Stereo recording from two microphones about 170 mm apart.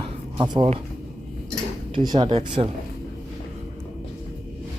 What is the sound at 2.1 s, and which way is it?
Speech, 30° right (ahead or behind).